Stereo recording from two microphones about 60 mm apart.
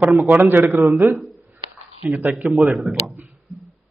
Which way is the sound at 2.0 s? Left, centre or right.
Right.